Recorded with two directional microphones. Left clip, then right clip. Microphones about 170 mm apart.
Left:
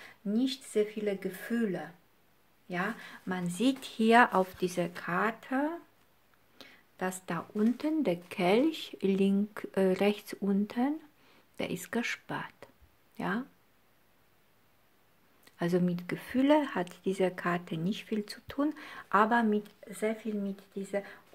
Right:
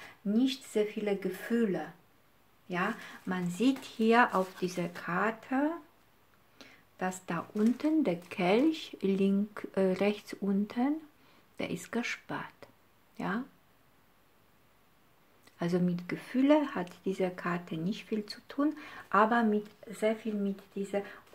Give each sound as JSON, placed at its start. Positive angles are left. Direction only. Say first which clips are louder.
{"t": 0.3, "sound": "speech", "louder": "right 1 dB", "side_deg": 30}
{"t": 15.4, "sound": "speech", "louder": "left 2 dB", "side_deg": 30}